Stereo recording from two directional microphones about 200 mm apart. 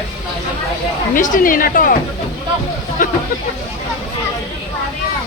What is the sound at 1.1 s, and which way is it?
Speech, 40° left (ahead or behind).